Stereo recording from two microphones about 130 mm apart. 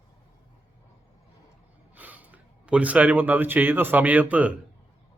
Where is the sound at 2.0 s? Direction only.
10° right (ahead or behind).